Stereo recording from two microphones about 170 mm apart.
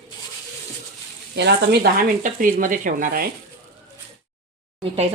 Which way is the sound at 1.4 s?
70° right (ahead or behind).